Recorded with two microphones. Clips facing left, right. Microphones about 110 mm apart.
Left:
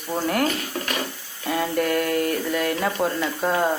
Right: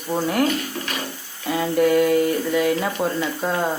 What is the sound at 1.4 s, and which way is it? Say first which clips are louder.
Speech: right 4 dB; centre (ahead or behind).